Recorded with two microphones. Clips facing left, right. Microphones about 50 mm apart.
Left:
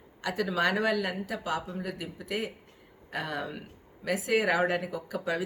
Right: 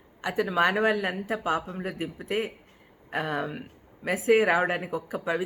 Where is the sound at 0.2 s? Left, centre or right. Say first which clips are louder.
Right 4 dB; right.